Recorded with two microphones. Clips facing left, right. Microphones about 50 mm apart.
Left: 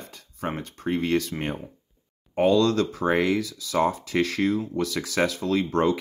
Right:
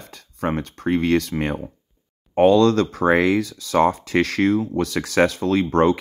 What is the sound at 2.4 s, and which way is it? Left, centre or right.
Speech, right.